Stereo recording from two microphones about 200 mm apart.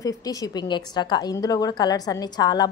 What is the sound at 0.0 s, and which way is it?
A woman's voice, 15° left (ahead or behind).